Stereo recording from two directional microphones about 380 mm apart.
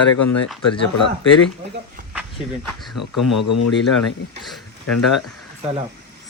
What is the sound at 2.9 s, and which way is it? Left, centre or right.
Speech, left.